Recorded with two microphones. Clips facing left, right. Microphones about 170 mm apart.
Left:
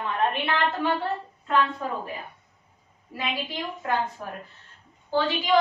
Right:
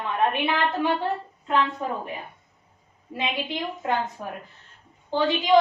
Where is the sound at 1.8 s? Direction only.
20° right (ahead or behind).